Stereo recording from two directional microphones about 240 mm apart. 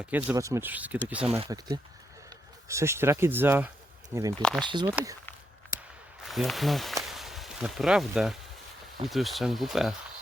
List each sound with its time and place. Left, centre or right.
0.1 s speech: centre
1.3 s speech: centre
4.9 s speech: centre
6.2 s speech: centre
7.1 s a sound: centre
9.0 s speech: centre